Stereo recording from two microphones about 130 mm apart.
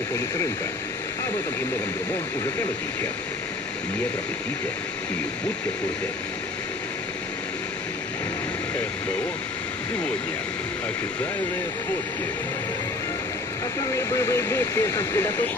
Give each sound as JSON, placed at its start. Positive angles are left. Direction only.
{"t": 13.9, "sound": "speech", "side_deg": 20}